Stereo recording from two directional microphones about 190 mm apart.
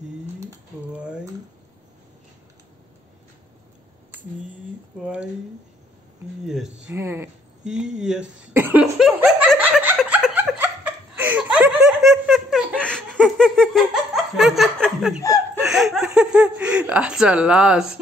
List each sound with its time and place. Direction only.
0.4 s pigeon: 15° right (ahead or behind)
5.0 s speech: 5° right (ahead or behind)
6.4 s speech: centre (ahead or behind)
6.9 s speech: 15° right (ahead or behind)
7.6 s speech: 5° right (ahead or behind)
8.9 s laughter: 5° right (ahead or behind)
15.2 s chuckle: 15° left (ahead or behind)
15.6 s speech: centre (ahead or behind)